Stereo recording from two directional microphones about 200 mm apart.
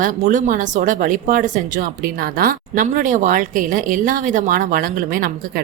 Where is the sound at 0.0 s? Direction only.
40° right (ahead or behind).